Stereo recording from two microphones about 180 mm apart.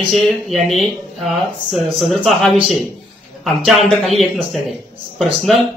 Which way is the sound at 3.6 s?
Centre (ahead or behind).